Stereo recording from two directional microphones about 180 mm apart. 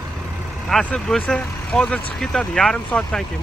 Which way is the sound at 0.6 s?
5° left (ahead or behind).